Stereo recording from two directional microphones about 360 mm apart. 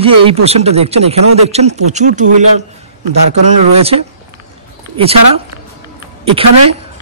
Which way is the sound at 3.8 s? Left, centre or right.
Centre.